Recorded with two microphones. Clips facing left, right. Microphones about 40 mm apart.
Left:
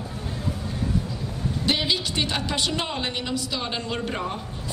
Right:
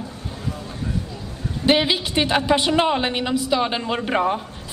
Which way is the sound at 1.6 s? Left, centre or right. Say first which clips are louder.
Right 7 dB; right.